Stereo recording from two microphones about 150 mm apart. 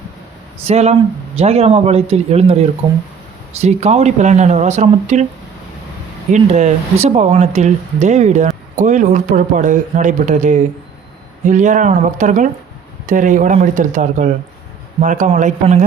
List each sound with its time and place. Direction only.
0.6 s speech: 45° right (ahead or behind)
6.3 s speech: 50° right (ahead or behind)